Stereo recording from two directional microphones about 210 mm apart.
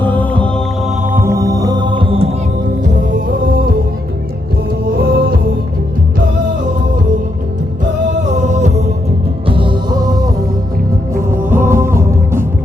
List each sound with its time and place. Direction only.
0.0 s music: 10° left (ahead or behind)
1.1 s music: 15° right (ahead or behind)
3.4 s music: 50° right (ahead or behind)
4.9 s music: 45° right (ahead or behind)
8.4 s music: 35° right (ahead or behind)
9.5 s music: 25° right (ahead or behind)